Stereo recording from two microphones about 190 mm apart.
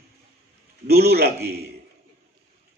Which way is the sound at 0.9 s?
55° right (ahead or behind).